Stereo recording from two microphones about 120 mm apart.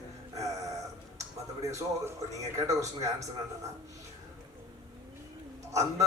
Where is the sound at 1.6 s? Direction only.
25° right (ahead or behind).